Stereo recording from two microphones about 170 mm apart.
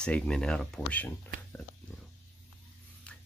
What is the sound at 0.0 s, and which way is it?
Speech, 5° left (ahead or behind).